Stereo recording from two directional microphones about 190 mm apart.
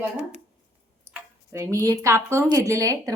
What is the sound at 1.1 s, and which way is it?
Speech, 15° right (ahead or behind).